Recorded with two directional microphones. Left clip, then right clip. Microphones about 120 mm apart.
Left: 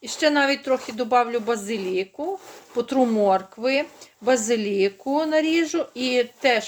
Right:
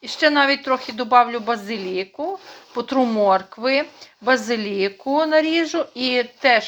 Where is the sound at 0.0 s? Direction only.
40° left (ahead or behind).